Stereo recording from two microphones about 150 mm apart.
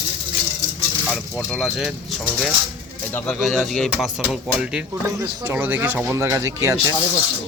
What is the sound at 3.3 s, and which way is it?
Speech, centre (ahead or behind).